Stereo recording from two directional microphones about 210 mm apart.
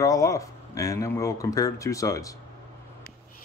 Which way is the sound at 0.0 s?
15° left (ahead or behind).